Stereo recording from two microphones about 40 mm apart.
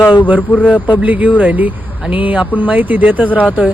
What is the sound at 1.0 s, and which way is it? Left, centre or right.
Speech, right.